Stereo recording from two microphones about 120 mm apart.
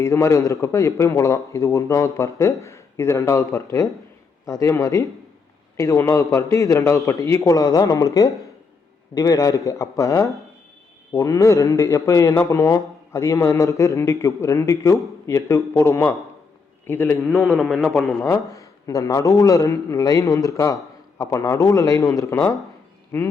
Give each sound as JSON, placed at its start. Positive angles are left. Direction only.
{"t": 0.0, "sound": "a man's voice", "side_deg": 25}
{"t": 17.2, "sound": "a man's voice", "side_deg": 0}
{"t": 18.2, "sound": "speech", "side_deg": 25}